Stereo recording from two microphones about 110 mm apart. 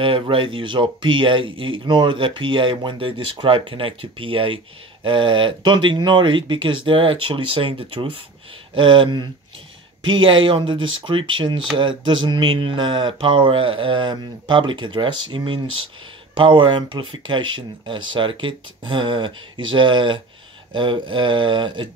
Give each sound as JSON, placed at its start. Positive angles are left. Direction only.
{"t": 0.0, "sound": "speech", "side_deg": -55}